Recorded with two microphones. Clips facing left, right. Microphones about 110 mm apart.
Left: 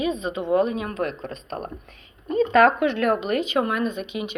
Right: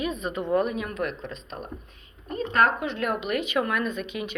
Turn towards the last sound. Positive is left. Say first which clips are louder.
# left 3 dB
turn(degrees=20)  # may be behind; listen again after turning